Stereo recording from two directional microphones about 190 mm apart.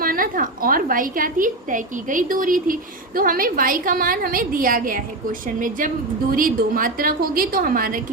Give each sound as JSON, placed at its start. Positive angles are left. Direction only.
{"t": 0.0, "sound": "a woman's voice", "side_deg": -50}